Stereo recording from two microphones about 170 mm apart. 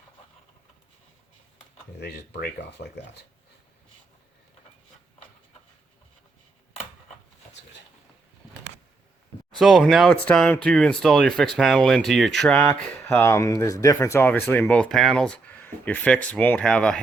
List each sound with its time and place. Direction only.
2.0 s speech: 75° left (ahead or behind)
9.6 s speech: centre (ahead or behind)
13.1 s speech: 15° left (ahead or behind)